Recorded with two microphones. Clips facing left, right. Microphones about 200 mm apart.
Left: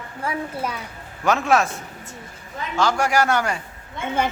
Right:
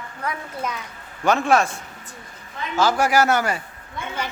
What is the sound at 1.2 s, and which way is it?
Speech, centre (ahead or behind).